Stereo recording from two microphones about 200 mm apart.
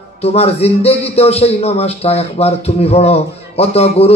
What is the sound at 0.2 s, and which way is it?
Speech, 30° left (ahead or behind).